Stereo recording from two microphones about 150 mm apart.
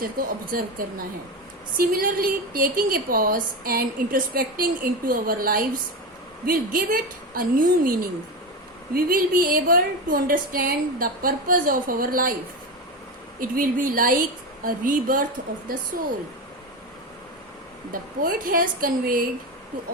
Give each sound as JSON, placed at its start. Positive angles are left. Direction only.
{"t": 0.0, "sound": "a woman's voice", "side_deg": -70}
{"t": 9.0, "sound": "a woman's voice", "side_deg": -70}
{"t": 13.4, "sound": "a woman's voice", "side_deg": -70}
{"t": 17.9, "sound": "a woman's voice", "side_deg": -70}